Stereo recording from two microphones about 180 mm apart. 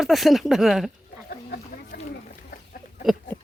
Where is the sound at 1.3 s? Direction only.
60° left (ahead or behind).